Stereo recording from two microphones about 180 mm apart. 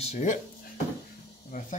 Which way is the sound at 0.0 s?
40° left (ahead or behind).